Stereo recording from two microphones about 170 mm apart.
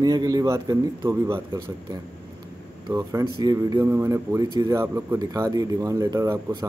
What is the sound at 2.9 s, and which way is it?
Speech, 20° right (ahead or behind).